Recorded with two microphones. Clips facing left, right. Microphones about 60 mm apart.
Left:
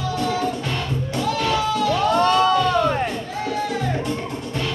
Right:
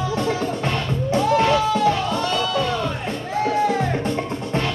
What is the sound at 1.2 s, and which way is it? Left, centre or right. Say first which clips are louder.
Music: right 3 dB; right.